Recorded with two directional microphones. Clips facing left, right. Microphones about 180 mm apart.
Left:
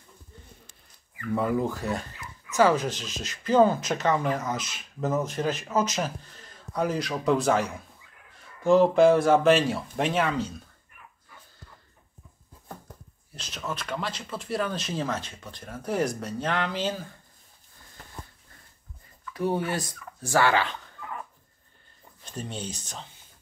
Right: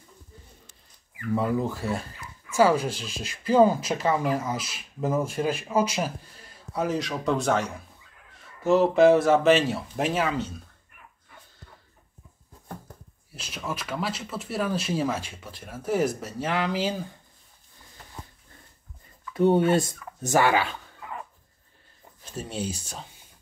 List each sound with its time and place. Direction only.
1.3 s speech: centre (ahead or behind)
13.3 s speech: 5° right (ahead or behind)
19.3 s speech: 25° right (ahead or behind); by 20.9 s 5° right (ahead or behind)
22.2 s speech: 5° right (ahead or behind)